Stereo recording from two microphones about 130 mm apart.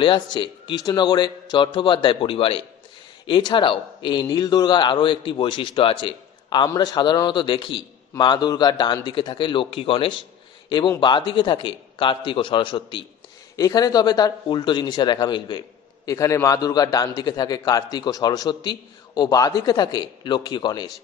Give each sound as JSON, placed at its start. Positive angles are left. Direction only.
{"t": 0.0, "sound": "a man's voice", "side_deg": 40}
{"t": 13.6, "sound": "a man's voice", "side_deg": 30}
{"t": 16.1, "sound": "a man's voice", "side_deg": 25}